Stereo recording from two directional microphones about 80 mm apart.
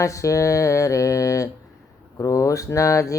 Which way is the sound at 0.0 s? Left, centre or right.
Left.